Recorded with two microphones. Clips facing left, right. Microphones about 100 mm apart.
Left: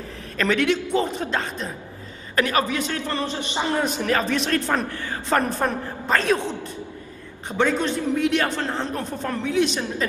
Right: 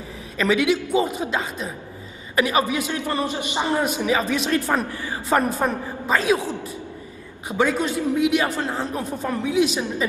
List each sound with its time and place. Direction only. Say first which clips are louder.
0.4 s a man's voice: right 1 dB; 5° right (ahead or behind)